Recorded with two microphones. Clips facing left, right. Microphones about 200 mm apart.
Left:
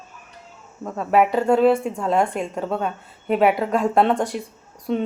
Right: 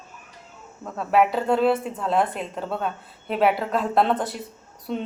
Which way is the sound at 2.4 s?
45° left (ahead or behind).